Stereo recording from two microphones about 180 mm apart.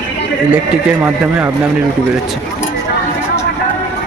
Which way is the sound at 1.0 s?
5° right (ahead or behind).